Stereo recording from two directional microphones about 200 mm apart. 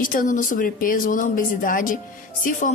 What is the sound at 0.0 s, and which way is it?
A woman's voice, 40° left (ahead or behind).